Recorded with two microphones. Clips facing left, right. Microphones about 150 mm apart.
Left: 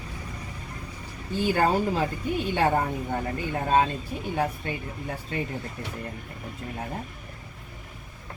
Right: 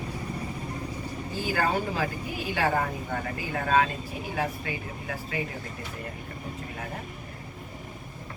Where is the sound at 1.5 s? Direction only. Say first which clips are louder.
Left 2 dB; 25° left (ahead or behind).